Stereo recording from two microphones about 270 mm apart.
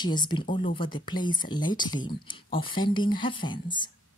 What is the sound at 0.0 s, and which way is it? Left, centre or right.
Speech, centre.